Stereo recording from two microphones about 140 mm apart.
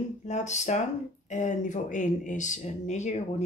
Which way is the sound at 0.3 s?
55° left (ahead or behind).